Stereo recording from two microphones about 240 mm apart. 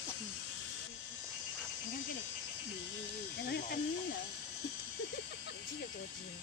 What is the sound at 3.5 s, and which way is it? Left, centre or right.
Speech, left.